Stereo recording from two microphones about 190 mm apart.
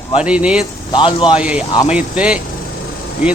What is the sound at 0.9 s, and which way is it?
Speech, 25° left (ahead or behind).